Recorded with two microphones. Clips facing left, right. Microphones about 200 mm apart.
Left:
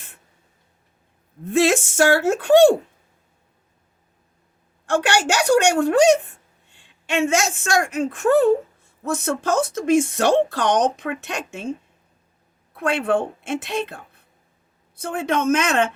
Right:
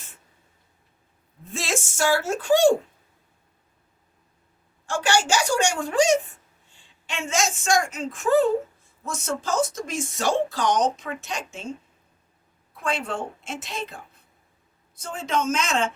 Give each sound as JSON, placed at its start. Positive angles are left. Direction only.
{"t": 1.5, "sound": "speech", "side_deg": 65}
{"t": 4.9, "sound": "a woman's voice", "side_deg": 65}
{"t": 12.7, "sound": "speech", "side_deg": 60}
{"t": 15.0, "sound": "speech", "side_deg": 60}